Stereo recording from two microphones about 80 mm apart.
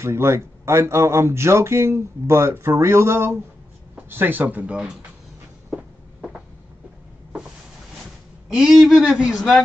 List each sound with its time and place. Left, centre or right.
0.0 s speech: right
4.1 s speech: right
8.5 s a man's voice: centre